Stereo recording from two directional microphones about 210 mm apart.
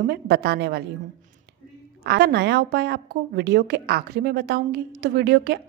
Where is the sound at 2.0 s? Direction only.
50° right (ahead or behind).